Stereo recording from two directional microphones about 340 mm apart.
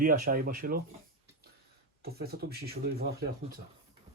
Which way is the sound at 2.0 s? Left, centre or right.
Right.